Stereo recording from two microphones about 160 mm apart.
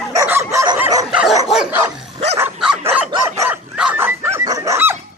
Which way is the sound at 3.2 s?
15° right (ahead or behind).